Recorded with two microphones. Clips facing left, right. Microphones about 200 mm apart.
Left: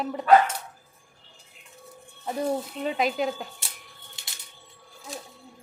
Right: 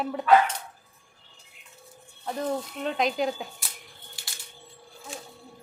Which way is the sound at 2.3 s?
10° left (ahead or behind).